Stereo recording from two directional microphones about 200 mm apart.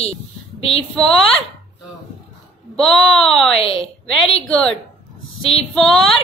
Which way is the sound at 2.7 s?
Centre (ahead or behind).